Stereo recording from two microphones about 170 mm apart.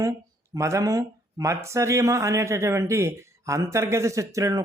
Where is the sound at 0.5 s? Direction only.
20° right (ahead or behind).